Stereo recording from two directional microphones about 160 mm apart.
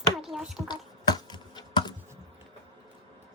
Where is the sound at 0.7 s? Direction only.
25° left (ahead or behind).